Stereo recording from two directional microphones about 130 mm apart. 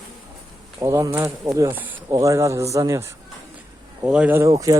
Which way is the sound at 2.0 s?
25° right (ahead or behind).